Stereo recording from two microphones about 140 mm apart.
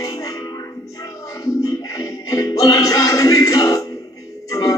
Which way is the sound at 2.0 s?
25° left (ahead or behind).